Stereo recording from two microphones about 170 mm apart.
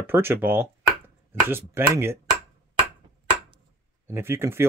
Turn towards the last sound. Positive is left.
turn(degrees=-15)  # may be behind; listen again after turning